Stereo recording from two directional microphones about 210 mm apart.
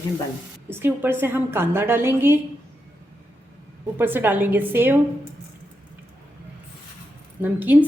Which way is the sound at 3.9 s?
10° right (ahead or behind).